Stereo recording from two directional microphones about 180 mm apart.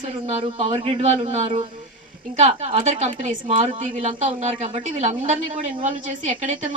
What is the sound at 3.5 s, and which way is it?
Speech, 30° right (ahead or behind).